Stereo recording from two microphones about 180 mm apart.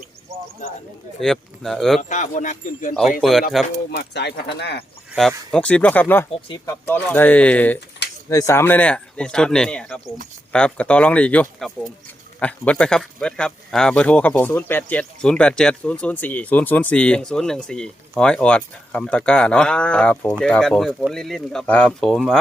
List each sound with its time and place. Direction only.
1.2 s a man's voice: centre (ahead or behind)
2.0 s speech: 45° left (ahead or behind)
2.9 s a man's voice: centre (ahead or behind)
3.9 s speech: 70° left (ahead or behind)
5.5 s a man's voice: 5° left (ahead or behind)